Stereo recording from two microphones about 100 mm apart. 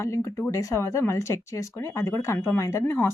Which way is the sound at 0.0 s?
30° left (ahead or behind).